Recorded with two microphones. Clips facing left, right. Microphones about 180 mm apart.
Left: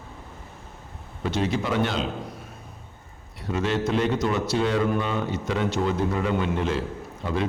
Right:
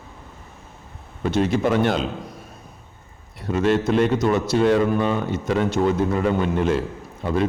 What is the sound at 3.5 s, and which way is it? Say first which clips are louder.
A man's voice: right 5 dB; 50° right (ahead or behind).